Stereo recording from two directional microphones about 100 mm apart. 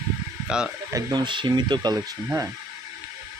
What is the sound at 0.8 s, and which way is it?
Speech, 35° right (ahead or behind).